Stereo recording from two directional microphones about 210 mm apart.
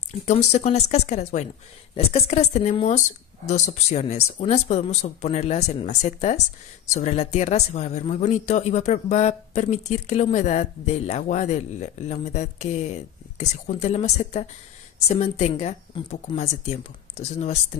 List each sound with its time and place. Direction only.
0.1 s a woman's voice: 30° left (ahead or behind)